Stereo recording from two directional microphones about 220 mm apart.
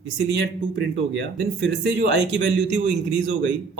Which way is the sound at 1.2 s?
50° right (ahead or behind).